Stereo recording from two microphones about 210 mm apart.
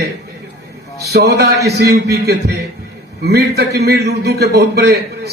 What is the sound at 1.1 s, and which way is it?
A man's voice, 50° right (ahead or behind).